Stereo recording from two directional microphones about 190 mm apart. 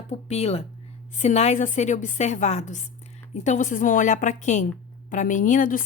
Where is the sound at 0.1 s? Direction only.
35° left (ahead or behind).